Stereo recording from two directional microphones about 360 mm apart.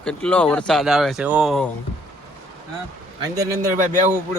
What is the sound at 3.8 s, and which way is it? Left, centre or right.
Speech, right.